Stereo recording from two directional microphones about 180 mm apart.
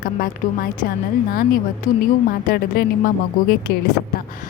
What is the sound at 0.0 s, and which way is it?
Speech, 50° left (ahead or behind).